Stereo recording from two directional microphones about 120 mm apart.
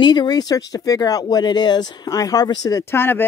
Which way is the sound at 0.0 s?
40° left (ahead or behind).